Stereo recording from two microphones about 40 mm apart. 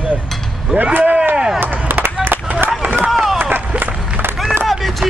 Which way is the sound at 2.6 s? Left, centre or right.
Right.